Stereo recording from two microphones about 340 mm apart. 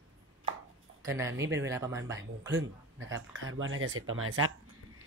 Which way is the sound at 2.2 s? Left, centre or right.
Right.